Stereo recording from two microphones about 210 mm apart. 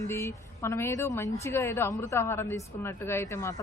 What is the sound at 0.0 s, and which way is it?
A woman's voice, 15° left (ahead or behind).